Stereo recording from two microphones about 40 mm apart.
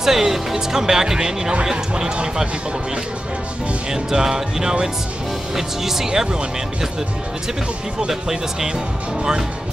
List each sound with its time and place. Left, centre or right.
0.0 s speech: centre
3.9 s speech: centre
8.1 s speech: centre